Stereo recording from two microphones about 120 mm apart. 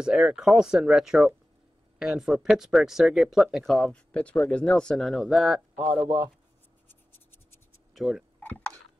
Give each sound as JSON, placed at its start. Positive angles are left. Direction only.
{"t": 0.0, "sound": "speech", "side_deg": -5}
{"t": 5.9, "sound": "a man's voice", "side_deg": -20}
{"t": 6.9, "sound": "scratch", "side_deg": 20}
{"t": 7.9, "sound": "a sound", "side_deg": -5}
{"t": 8.4, "sound": "dishes", "side_deg": 15}